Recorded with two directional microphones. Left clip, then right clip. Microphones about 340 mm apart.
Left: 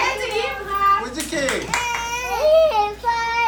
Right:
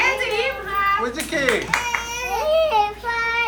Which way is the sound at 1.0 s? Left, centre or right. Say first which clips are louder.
Right 2 dB; centre.